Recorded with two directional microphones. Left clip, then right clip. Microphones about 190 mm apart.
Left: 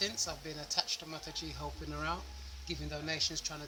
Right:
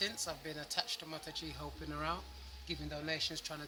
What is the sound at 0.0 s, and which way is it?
Speech, 10° right (ahead or behind).